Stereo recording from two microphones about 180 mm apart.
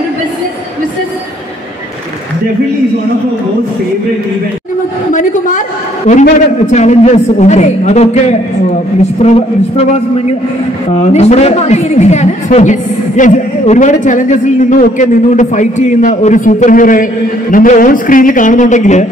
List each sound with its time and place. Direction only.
5.1 s a woman's voice: 45° left (ahead or behind)